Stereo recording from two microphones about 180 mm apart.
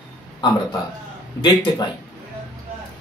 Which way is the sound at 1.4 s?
25° left (ahead or behind).